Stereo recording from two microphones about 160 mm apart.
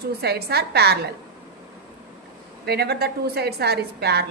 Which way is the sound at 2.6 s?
85° right.